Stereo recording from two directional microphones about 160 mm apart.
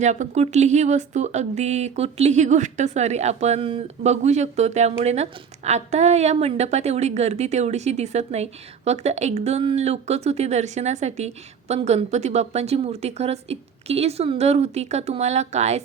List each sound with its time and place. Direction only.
0.0 s speech: 50° right (ahead or behind)